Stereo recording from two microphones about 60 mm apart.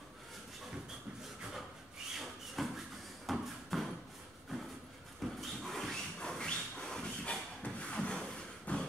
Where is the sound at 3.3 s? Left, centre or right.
Centre.